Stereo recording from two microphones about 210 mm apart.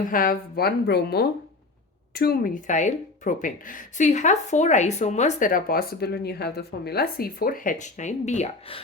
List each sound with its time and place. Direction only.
0.1 s speech: 45° left (ahead or behind)